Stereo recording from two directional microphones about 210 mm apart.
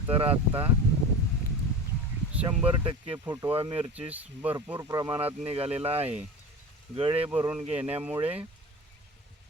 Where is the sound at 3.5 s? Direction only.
25° right (ahead or behind).